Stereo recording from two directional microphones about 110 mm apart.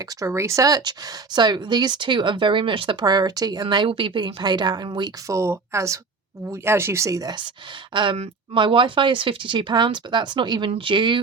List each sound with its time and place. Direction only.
0.0 s speech: 30° right (ahead or behind); by 3.0 s 50° right (ahead or behind)
3.0 s speech: 40° right (ahead or behind)
5.3 s speech: 25° right (ahead or behind); by 11.2 s 50° right (ahead or behind)